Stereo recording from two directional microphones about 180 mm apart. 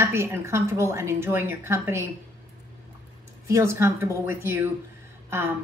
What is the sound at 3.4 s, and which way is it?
A woman's voice, 15° right (ahead or behind).